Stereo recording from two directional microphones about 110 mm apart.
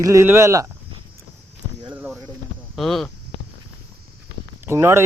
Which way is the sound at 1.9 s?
10° right (ahead or behind).